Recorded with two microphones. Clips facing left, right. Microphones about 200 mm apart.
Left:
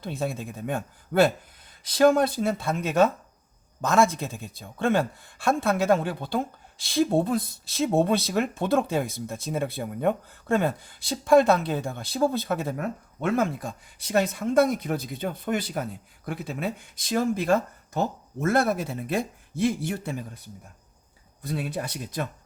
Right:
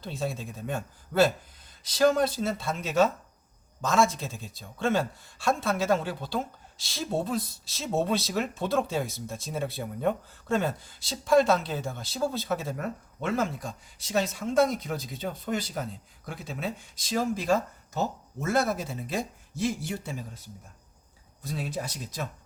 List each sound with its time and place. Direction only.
0.0 s a man's voice: 55° left (ahead or behind)